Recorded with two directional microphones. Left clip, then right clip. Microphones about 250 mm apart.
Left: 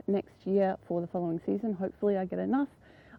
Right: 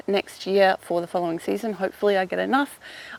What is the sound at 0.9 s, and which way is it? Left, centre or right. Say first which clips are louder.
Speech: right 8 dB; right.